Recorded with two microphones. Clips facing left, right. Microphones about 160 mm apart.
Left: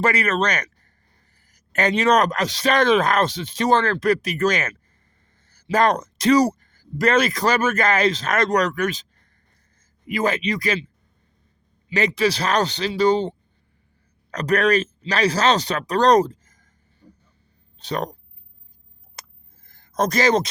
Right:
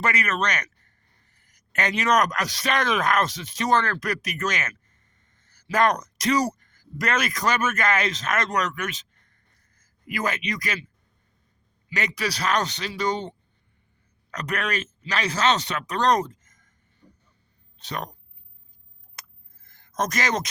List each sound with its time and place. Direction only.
0.0 s speech: 30° left (ahead or behind)
10.1 s speech: 30° left (ahead or behind)
11.9 s speech: 30° left (ahead or behind)
17.0 s vehicle: 30° left (ahead or behind)
17.7 s speech: 30° left (ahead or behind)
19.2 s a sound: 30° left (ahead or behind)